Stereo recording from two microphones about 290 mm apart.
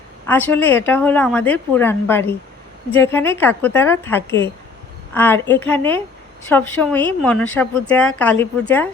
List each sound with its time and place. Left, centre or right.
0.3 s a woman's voice: centre